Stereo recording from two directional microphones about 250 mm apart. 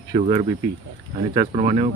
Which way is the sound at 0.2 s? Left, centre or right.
Right.